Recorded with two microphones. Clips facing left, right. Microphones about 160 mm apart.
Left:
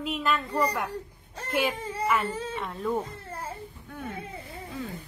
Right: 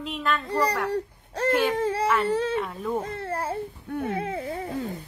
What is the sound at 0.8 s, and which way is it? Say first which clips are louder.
Speech: right 8 dB; 80° right.